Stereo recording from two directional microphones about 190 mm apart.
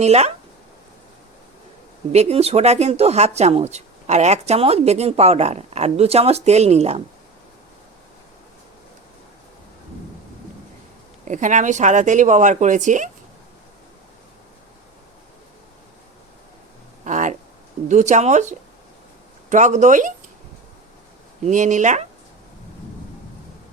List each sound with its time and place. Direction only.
0.0 s speech: 35° right (ahead or behind)
2.1 s speech: 35° right (ahead or behind)
11.3 s speech: 40° right (ahead or behind)
17.0 s a sound: 40° right (ahead or behind)
17.8 s speech: 40° right (ahead or behind)
21.4 s speech: 40° right (ahead or behind)